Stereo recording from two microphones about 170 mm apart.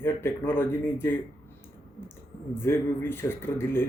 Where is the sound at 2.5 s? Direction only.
15° left (ahead or behind).